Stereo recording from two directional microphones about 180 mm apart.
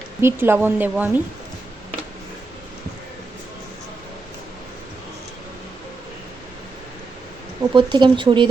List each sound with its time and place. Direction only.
0.2 s a woman's voice: 15° right (ahead or behind)
7.6 s speech: 25° right (ahead or behind)